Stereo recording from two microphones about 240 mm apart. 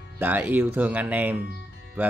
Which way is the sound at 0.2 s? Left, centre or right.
Centre.